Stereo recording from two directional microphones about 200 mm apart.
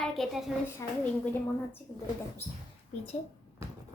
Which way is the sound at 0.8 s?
15° left (ahead or behind).